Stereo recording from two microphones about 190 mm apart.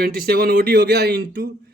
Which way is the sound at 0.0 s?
55° right (ahead or behind).